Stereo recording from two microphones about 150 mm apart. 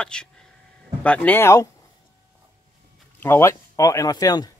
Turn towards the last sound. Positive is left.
turn(degrees=25)  # may be behind; listen again after turning